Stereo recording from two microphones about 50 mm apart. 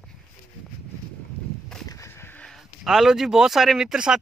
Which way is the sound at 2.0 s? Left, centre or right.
Left.